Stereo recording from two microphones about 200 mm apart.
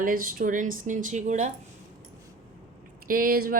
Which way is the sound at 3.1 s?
45° right (ahead or behind).